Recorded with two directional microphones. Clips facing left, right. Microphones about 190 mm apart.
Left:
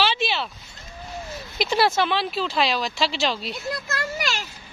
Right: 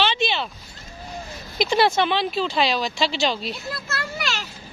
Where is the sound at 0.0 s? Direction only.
5° left (ahead or behind).